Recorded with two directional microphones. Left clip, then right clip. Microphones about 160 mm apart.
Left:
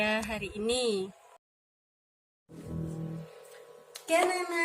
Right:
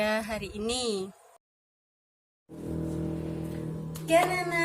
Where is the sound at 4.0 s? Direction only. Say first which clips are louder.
Right 3 dB; 25° left (ahead or behind).